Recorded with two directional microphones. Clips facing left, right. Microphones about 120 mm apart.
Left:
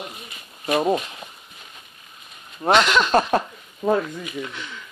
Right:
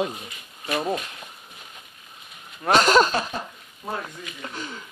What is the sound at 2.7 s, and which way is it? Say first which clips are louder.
Speech: even; 40° right (ahead or behind).